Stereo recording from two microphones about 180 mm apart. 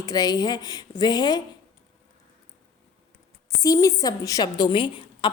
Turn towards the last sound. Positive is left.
turn(degrees=25)  # may be behind; listen again after turning